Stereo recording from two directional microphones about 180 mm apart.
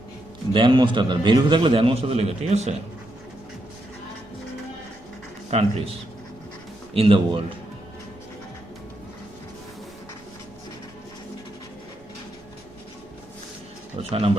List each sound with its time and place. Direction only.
0.5 s a man's voice: 25° right (ahead or behind)
5.5 s a man's voice: 35° right (ahead or behind)
6.9 s a man's voice: 30° right (ahead or behind)
14.0 s a man's voice: 35° right (ahead or behind)